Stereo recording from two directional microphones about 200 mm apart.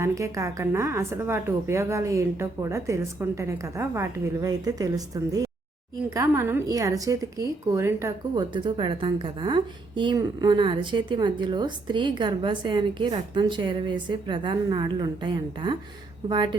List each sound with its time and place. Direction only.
0.0 s a woman's voice: 15° right (ahead or behind)